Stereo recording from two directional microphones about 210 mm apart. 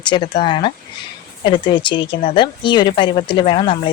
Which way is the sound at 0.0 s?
20° left (ahead or behind).